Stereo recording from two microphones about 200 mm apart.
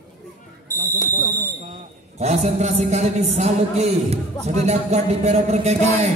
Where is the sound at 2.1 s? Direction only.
35° right (ahead or behind).